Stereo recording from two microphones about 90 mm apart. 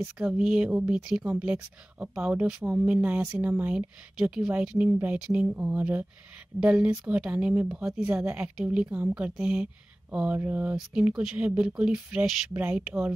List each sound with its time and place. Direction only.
0.3 s speech: 10° right (ahead or behind)
2.6 s speech: 20° right (ahead or behind)
3.7 s speech: 10° right (ahead or behind)